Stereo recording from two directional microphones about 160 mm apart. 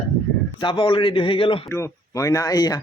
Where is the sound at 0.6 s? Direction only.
30° left (ahead or behind).